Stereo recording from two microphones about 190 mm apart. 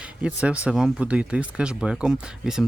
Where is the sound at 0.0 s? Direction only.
5° right (ahead or behind).